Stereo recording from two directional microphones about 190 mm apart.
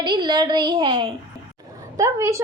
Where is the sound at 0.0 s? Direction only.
25° right (ahead or behind).